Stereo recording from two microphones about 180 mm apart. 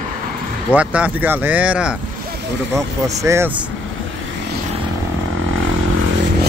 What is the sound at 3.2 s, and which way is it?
Speech, 15° right (ahead or behind).